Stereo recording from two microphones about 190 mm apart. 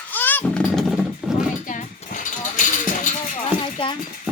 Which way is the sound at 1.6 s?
40° left (ahead or behind).